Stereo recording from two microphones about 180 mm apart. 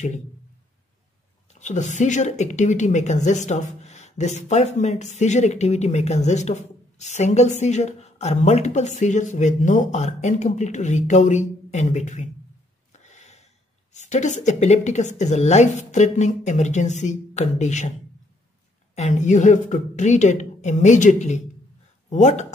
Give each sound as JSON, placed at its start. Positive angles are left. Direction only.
{"t": 1.5, "sound": "speech", "side_deg": 40}
{"t": 12.9, "sound": "a sound", "side_deg": 40}
{"t": 13.9, "sound": "speech", "side_deg": 40}
{"t": 18.9, "sound": "speech", "side_deg": 40}